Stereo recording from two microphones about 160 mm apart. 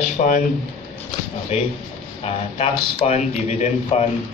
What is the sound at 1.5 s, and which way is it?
A man's voice, 40° left (ahead or behind).